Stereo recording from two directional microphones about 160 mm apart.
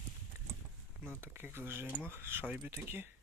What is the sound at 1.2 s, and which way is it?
Speech, 15° right (ahead or behind).